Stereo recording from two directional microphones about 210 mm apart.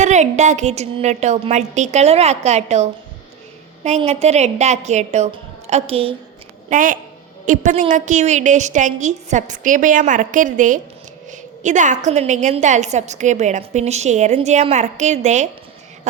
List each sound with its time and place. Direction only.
0.0 s a woman's voice: 35° right (ahead or behind)
6.7 s a woman's voice: 40° right (ahead or behind)